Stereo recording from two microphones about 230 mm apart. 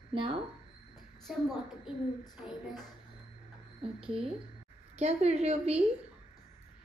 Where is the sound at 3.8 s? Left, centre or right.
Right.